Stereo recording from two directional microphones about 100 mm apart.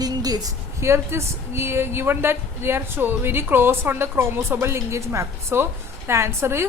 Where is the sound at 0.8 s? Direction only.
25° right (ahead or behind).